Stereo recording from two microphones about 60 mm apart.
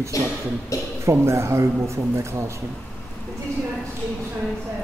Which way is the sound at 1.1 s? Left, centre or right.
Right.